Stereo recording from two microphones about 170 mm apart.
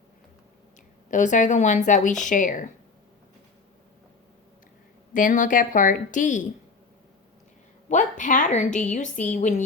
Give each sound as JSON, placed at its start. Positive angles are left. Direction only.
{"t": 1.1, "sound": "a woman's voice", "side_deg": 45}
{"t": 5.1, "sound": "a woman's voice", "side_deg": 50}
{"t": 7.9, "sound": "a woman's voice", "side_deg": 50}